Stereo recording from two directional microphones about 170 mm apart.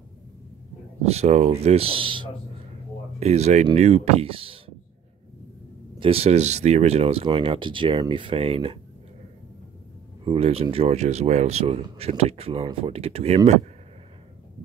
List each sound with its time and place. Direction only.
1.0 s speech: 40° right (ahead or behind)
5.9 s speech: 35° right (ahead or behind)
10.2 s speech: 35° right (ahead or behind)